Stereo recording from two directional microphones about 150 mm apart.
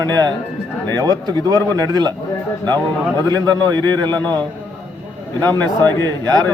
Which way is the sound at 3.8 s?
30° right (ahead or behind).